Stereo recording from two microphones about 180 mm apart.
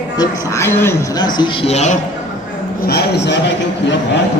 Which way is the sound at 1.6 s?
40° left (ahead or behind).